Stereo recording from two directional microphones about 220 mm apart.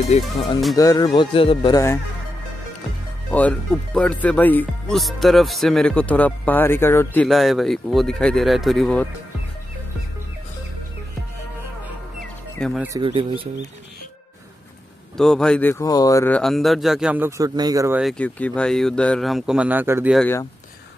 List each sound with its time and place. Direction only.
0.1 s speech: 30° left (ahead or behind)
0.7 s speech: 15° left (ahead or behind)
3.3 s speech: 5° left (ahead or behind)
7.2 s speech: centre (ahead or behind)
12.5 s speech: 5° left (ahead or behind)
12.8 s speech: 20° right (ahead or behind)
15.1 s speech: centre (ahead or behind); by 18.0 s 15° right (ahead or behind)
18.0 s speech: 5° left (ahead or behind)
20.2 s speech: 10° left (ahead or behind)